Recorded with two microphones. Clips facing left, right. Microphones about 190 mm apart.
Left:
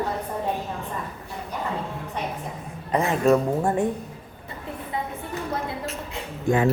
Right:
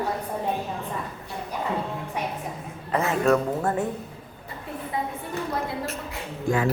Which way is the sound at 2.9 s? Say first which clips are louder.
Left 2 dB; 15° left (ahead or behind).